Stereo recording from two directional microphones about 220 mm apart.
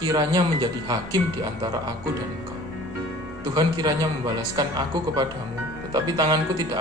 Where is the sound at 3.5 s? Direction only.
20° right (ahead or behind).